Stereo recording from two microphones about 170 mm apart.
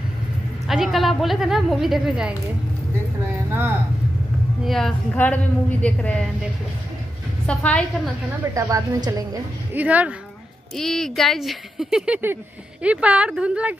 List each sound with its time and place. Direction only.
0.7 s a woman's voice: centre (ahead or behind)
4.6 s a woman's voice: centre (ahead or behind)
7.4 s a woman's voice: 5° left (ahead or behind)
8.5 s a woman's voice: 20° right (ahead or behind)
9.8 s a woman's voice: 10° right (ahead or behind)
10.8 s a woman's voice: centre (ahead or behind)